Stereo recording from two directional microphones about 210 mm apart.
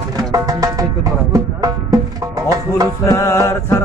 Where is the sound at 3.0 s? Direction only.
15° left (ahead or behind).